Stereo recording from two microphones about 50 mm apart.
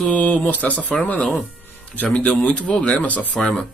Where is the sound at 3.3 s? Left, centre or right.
Centre.